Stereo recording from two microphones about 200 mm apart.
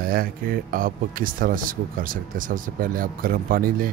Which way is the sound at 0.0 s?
45° right (ahead or behind).